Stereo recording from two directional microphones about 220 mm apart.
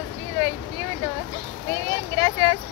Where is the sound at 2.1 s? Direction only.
20° left (ahead or behind).